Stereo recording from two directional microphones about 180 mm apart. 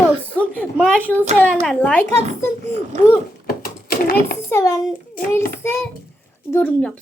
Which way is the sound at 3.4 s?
55° left (ahead or behind).